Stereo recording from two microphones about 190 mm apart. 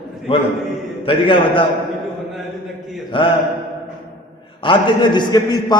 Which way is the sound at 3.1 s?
25° left (ahead or behind).